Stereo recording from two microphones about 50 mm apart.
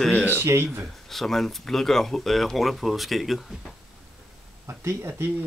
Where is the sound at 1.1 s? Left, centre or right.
Centre.